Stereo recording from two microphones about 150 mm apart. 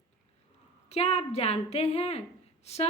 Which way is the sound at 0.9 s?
45° left (ahead or behind).